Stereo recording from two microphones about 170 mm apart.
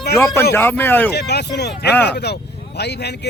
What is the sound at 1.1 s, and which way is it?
Speech, 80° left.